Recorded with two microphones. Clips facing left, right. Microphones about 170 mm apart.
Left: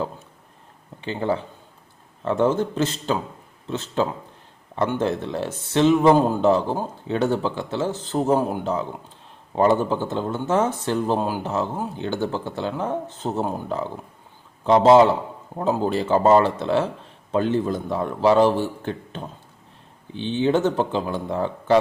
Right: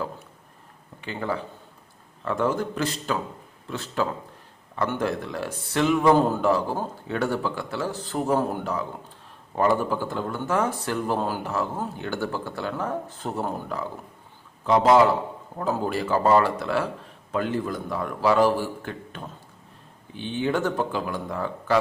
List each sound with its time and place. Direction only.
1.0 s speech: 25° left (ahead or behind)